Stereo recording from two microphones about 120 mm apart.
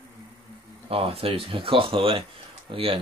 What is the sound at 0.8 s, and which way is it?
Speech, 50° right (ahead or behind).